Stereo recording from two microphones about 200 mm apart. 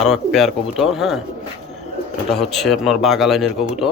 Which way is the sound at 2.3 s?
Centre (ahead or behind).